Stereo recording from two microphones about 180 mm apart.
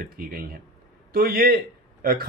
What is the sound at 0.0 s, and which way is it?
Speech, 55° right (ahead or behind).